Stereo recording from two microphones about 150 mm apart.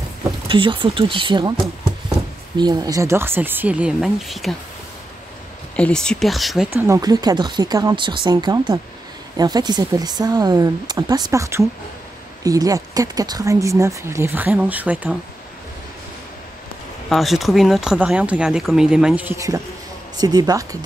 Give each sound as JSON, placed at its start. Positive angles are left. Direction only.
{"t": 0.5, "sound": "speech", "side_deg": -35}
{"t": 2.5, "sound": "speech", "side_deg": -30}
{"t": 5.8, "sound": "speech", "side_deg": 5}
{"t": 6.7, "sound": "speech", "side_deg": -25}
{"t": 17.1, "sound": "speech", "side_deg": 0}
{"t": 19.3, "sound": "speech", "side_deg": -20}